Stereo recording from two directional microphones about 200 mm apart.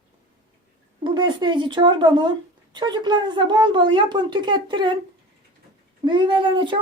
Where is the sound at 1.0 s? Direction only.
25° right (ahead or behind).